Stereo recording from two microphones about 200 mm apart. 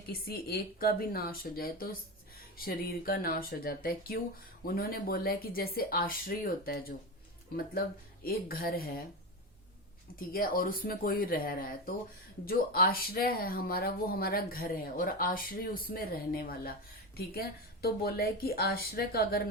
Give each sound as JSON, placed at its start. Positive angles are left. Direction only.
{"t": 0.1, "sound": "speech", "side_deg": 50}
{"t": 10.2, "sound": "speech", "side_deg": 45}
{"t": 17.8, "sound": "speech", "side_deg": 50}